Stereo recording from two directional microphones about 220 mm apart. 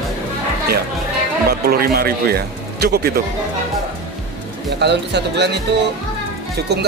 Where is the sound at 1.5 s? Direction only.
45° right (ahead or behind).